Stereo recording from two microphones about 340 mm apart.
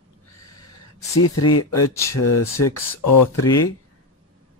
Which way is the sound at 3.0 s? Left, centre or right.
Left.